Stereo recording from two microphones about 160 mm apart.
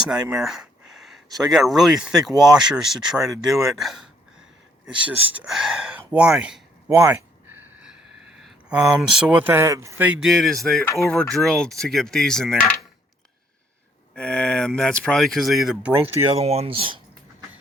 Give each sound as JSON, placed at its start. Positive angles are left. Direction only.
{"t": 0.1, "sound": "speech", "side_deg": -5}
{"t": 5.2, "sound": "speech", "side_deg": -10}
{"t": 6.1, "sound": "a sound", "side_deg": -5}
{"t": 10.2, "sound": "speech", "side_deg": 0}
{"t": 14.2, "sound": "speech", "side_deg": 5}
{"t": 16.3, "sound": "speech", "side_deg": -40}